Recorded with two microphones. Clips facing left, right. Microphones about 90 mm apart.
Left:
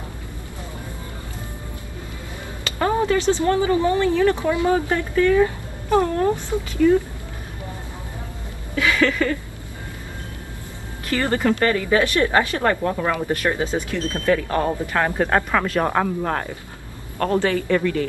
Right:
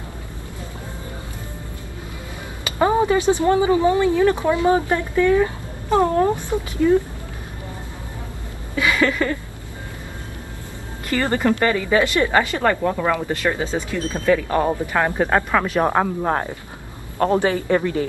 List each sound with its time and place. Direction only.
2.6 s a sound: 15° right (ahead or behind)
3.4 s a man's voice: 15° right (ahead or behind)
8.7 s a sound: 15° right (ahead or behind)
11.1 s speech: 15° right (ahead or behind)
11.7 s a woman's voice: 5° right (ahead or behind)
12.0 s speech: 15° right (ahead or behind)
12.3 s a woman's voice: 5° right (ahead or behind)
13.8 s a man's voice: 15° right (ahead or behind)